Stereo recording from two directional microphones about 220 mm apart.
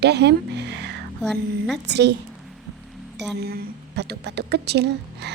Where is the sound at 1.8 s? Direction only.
50° right (ahead or behind).